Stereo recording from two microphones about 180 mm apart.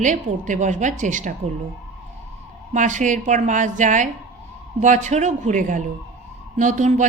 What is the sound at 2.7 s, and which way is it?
A woman's voice, 45° right (ahead or behind).